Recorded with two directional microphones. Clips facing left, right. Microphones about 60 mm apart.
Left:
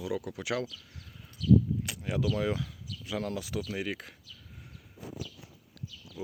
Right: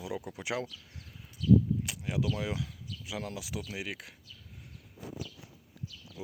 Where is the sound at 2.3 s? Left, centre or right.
Centre.